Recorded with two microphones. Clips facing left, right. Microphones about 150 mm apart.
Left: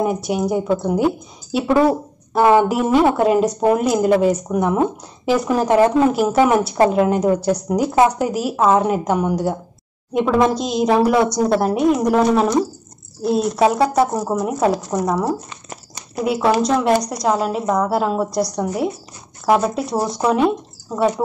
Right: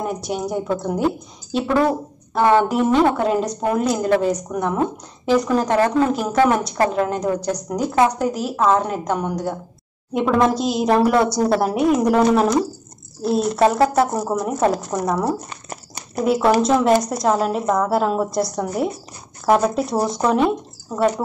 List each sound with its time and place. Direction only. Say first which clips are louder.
0.0 s a woman's voice: left 5 dB; 5° left (ahead or behind)
15.5 s crumpling: right 2 dB; 50° right (ahead or behind)
16.3 s a woman's voice: right 1 dB; centre (ahead or behind)